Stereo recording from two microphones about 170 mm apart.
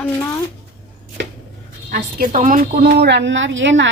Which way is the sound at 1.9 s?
55° right (ahead or behind).